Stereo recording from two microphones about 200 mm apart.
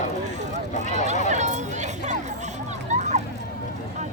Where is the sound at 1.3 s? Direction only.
35° right (ahead or behind).